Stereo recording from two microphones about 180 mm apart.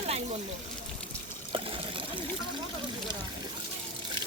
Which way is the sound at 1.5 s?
30° right (ahead or behind).